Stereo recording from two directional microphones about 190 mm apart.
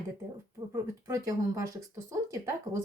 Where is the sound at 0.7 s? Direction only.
15° right (ahead or behind).